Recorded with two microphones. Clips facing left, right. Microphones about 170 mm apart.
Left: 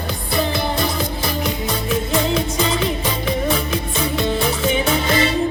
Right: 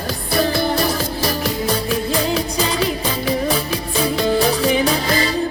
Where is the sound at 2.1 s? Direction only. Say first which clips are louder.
Even; 35° right (ahead or behind).